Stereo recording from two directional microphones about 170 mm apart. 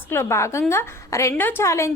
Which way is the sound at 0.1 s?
15° left (ahead or behind).